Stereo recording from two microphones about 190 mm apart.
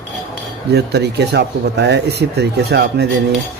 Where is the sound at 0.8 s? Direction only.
60° right (ahead or behind).